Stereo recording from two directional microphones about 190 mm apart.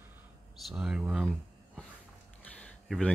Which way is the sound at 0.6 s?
5° right (ahead or behind).